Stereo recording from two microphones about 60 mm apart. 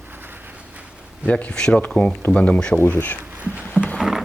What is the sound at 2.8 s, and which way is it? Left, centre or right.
Speech, left.